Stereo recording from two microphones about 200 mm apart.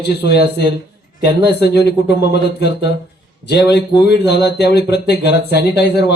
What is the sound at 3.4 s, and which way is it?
Speech, 55° left (ahead or behind).